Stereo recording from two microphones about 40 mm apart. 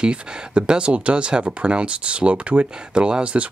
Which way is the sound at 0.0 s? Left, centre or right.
Right.